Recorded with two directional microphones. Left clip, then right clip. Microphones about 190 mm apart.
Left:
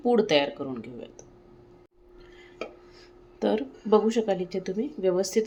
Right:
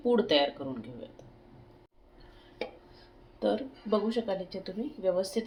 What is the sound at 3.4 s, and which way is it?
Speech, 50° left (ahead or behind).